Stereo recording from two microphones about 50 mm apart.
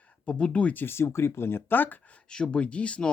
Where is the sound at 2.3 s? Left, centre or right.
Centre.